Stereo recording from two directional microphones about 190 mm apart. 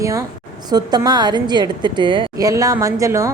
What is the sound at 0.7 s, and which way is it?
A woman's voice, 20° right (ahead or behind).